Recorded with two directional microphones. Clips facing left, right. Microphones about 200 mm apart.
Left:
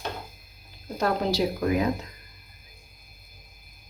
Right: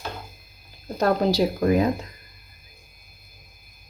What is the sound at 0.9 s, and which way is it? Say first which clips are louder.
Speech: right 4 dB; 35° right (ahead or behind).